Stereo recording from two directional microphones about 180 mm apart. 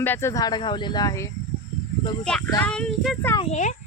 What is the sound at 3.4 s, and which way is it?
Speech, 40° left (ahead or behind).